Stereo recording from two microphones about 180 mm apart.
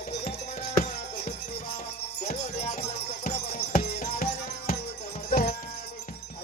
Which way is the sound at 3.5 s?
60° left (ahead or behind).